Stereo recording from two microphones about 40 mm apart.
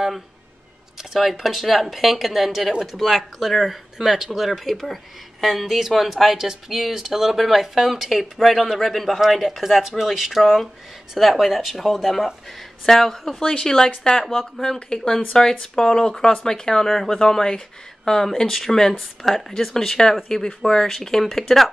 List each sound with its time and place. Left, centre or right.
1.1 s speech: centre
13.6 s speech: centre
14.2 s speech: centre
14.6 s speech: centre